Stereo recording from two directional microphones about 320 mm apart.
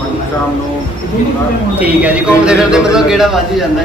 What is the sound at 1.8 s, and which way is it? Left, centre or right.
A man's voice, centre.